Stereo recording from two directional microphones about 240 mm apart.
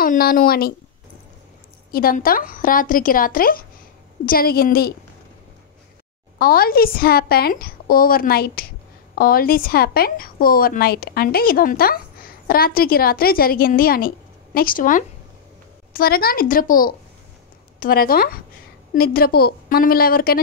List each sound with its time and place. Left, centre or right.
0.0 s a woman's voice: left
1.9 s a woman's voice: left
6.3 s a woman's voice: left